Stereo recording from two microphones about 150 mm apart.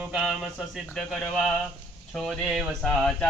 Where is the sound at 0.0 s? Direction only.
Centre (ahead or behind).